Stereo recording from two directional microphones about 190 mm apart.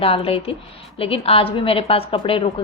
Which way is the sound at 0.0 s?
30° left (ahead or behind).